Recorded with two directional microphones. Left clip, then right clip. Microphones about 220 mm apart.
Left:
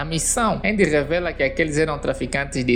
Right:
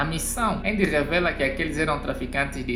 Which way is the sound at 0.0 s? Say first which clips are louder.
Left 4 dB; 35° left (ahead or behind).